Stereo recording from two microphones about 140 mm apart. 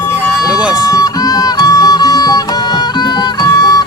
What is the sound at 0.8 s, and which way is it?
Music, 25° left (ahead or behind).